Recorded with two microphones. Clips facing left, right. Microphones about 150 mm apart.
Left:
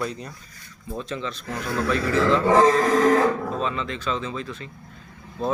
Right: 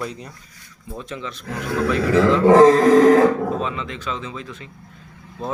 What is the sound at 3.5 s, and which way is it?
Speech, 15° right (ahead or behind).